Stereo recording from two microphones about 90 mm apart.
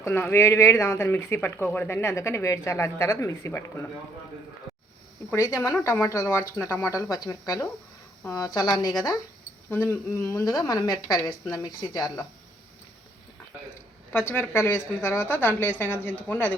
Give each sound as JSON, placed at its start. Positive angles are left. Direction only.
{"t": 0.0, "sound": "speech", "side_deg": 25}
{"t": 4.7, "sound": "a sound", "side_deg": 0}
{"t": 5.3, "sound": "speech", "side_deg": 30}
{"t": 9.6, "sound": "speech", "side_deg": 25}
{"t": 14.1, "sound": "speech", "side_deg": 25}